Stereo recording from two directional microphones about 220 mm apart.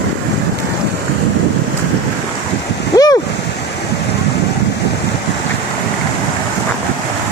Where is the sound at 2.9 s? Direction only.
15° left (ahead or behind).